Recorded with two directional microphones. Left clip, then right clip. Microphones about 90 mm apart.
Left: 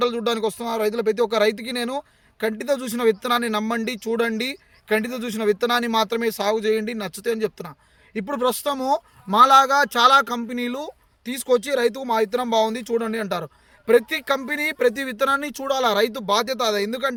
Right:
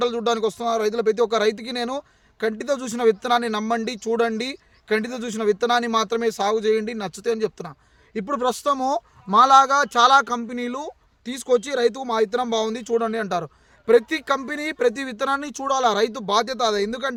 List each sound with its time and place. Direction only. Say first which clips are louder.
0.0 s speech: even; 30° right (ahead or behind)